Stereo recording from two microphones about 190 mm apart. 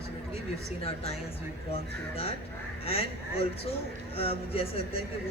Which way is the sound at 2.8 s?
30° left (ahead or behind).